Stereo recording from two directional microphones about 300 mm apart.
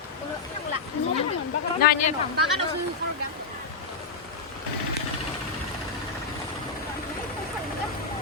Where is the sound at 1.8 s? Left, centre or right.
Left.